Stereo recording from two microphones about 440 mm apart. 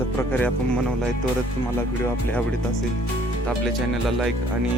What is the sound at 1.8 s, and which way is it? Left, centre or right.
Speech, centre.